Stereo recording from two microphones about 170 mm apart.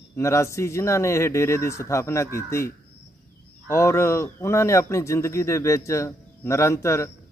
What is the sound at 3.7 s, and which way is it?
Speech, 15° left (ahead or behind).